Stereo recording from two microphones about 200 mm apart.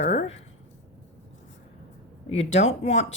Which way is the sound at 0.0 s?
35° left (ahead or behind).